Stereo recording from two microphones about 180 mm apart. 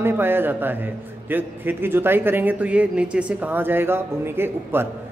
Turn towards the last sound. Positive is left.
turn(degrees=-10)  # may be behind; listen again after turning